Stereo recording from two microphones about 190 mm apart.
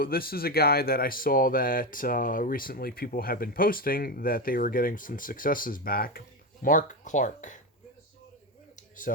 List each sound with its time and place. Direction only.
0.0 s speech: 50° left (ahead or behind)
9.1 s speech: 50° left (ahead or behind)